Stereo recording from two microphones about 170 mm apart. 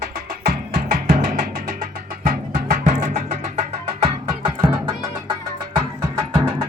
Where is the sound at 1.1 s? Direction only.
55° right (ahead or behind).